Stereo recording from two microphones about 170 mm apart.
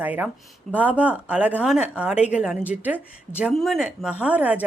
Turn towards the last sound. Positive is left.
turn(degrees=-10)  # may be behind; listen again after turning